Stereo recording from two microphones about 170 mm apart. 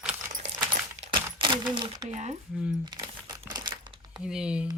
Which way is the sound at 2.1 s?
45° right (ahead or behind).